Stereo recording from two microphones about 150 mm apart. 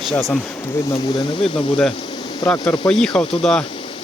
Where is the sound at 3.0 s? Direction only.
5° left (ahead or behind).